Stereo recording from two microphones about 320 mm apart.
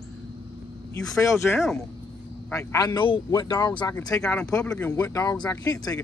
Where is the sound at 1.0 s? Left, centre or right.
Centre.